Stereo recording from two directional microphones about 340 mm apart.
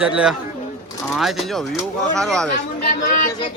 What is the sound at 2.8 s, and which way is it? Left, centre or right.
Speech, left.